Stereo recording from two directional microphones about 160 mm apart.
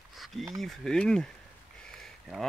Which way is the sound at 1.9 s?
Centre (ahead or behind).